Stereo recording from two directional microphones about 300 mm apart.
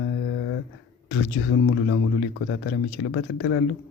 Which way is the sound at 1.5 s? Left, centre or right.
Left.